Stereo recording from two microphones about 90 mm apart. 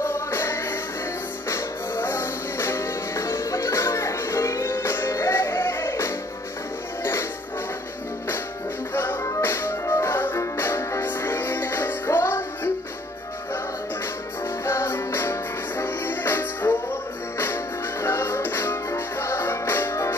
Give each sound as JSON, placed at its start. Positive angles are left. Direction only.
{"t": 0.0, "sound": "music", "side_deg": 25}
{"t": 8.9, "sound": "music", "side_deg": 25}
{"t": 14.6, "sound": "music", "side_deg": 30}
{"t": 18.0, "sound": "music", "side_deg": 30}